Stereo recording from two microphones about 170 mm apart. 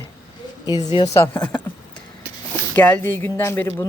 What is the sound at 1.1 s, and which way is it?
Speech, 15° left (ahead or behind).